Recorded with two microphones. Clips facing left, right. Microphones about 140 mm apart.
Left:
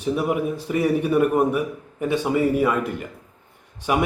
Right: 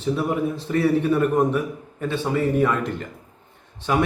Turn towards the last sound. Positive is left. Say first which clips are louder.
# even
turn(degrees=10)  # may be behind; listen again after turning